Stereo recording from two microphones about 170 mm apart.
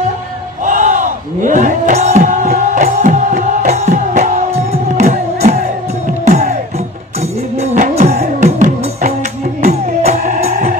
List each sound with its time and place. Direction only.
0.7 s battle cry: 45° right (ahead or behind)
6.2 s music: 45° right (ahead or behind)